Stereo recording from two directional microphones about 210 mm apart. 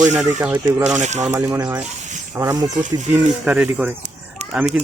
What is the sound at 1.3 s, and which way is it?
Speech, 15° right (ahead or behind).